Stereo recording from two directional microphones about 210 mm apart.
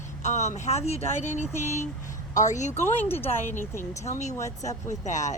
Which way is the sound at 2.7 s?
10° left (ahead or behind).